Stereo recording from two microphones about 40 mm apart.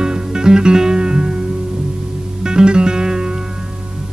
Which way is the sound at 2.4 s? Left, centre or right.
Right.